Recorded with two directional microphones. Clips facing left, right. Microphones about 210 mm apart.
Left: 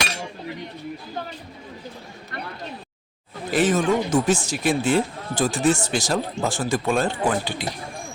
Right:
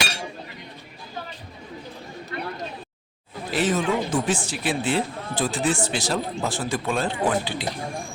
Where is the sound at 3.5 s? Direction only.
45° left (ahead or behind).